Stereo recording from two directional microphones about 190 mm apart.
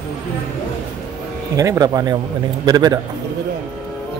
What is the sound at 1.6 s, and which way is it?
Speech, 20° right (ahead or behind).